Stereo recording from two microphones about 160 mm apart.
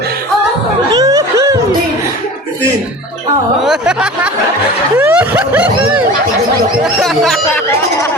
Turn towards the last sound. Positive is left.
turn(degrees=0)  # may be behind; listen again after turning